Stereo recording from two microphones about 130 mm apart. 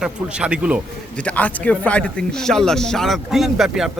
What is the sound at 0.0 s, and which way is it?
Speech, 5° right (ahead or behind).